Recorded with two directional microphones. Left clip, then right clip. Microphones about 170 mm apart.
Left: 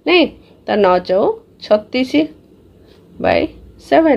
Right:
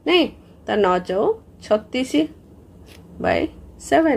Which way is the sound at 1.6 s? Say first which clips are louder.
Left 8 dB; 20° left (ahead or behind).